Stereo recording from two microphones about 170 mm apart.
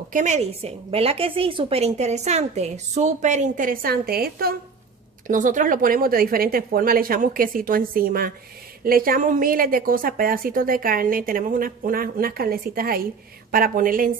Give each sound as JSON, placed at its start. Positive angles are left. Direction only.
{"t": 0.1, "sound": "a woman's voice", "side_deg": -45}
{"t": 5.2, "sound": "a woman's voice", "side_deg": -50}